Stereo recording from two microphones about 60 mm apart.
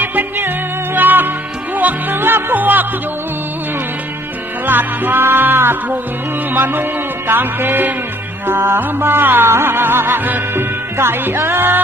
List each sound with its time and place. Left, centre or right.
0.0 s music: right
4.6 s music: right